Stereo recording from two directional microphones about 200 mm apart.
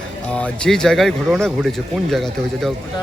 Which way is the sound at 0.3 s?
5° left (ahead or behind).